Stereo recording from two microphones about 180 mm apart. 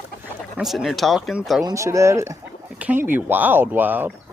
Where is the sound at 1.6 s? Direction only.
15° right (ahead or behind).